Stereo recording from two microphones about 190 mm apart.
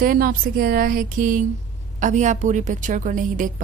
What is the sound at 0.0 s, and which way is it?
A woman's voice, 50° right (ahead or behind).